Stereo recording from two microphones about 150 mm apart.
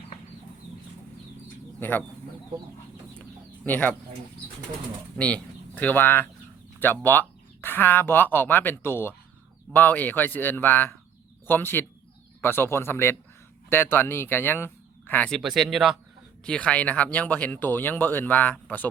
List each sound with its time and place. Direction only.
1.8 s speech: 10° left (ahead or behind)
3.2 s chicken: 10° left (ahead or behind)
5.1 s speech: 10° left (ahead or behind)
15.4 s speech: centre (ahead or behind)
16.4 s speech: 5° left (ahead or behind)